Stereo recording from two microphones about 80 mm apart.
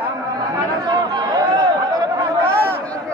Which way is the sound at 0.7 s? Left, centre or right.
Right.